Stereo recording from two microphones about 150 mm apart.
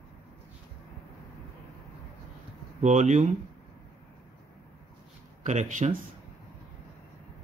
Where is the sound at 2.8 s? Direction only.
55° right (ahead or behind).